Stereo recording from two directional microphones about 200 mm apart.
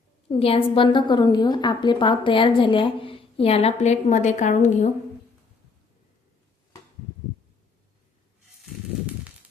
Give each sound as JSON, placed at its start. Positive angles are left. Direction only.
{"t": 0.3, "sound": "a woman's voice", "side_deg": 30}